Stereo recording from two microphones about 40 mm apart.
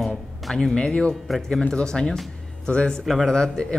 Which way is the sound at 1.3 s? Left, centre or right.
Centre.